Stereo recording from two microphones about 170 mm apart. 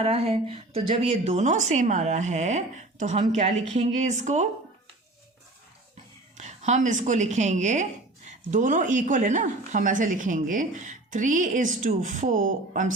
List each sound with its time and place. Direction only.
0.0 s speech: 35° right (ahead or behind)
6.3 s a woman's voice: 40° right (ahead or behind)